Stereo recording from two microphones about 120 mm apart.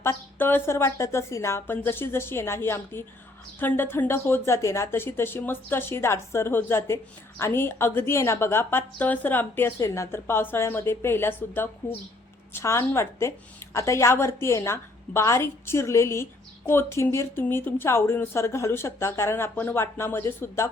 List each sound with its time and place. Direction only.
0.0 s speech: 20° left (ahead or behind)